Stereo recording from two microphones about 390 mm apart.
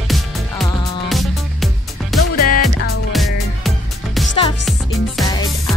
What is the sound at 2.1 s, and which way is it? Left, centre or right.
Music, centre.